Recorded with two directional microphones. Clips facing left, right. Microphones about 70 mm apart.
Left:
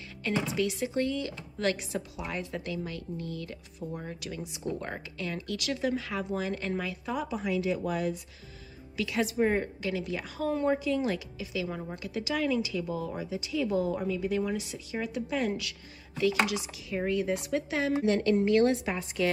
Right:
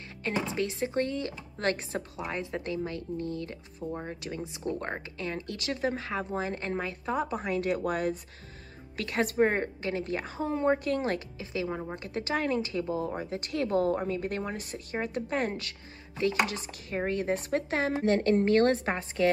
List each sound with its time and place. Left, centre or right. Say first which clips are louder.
0.2 s a woman's voice: left 1 dB; right
11.0 s speech: even; right
11.7 s a woman's voice: right 2 dB; right
12.0 s speech: left 1 dB; right
13.3 s a woman's voice: even; right